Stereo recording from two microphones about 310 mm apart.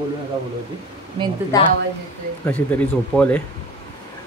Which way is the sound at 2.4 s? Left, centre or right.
Centre.